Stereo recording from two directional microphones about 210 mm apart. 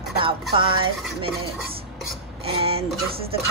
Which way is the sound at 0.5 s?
25° right (ahead or behind).